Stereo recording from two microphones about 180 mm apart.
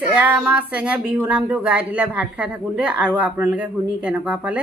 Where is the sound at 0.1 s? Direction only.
10° right (ahead or behind).